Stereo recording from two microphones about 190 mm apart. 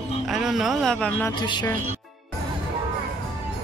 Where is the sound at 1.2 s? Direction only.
25° left (ahead or behind).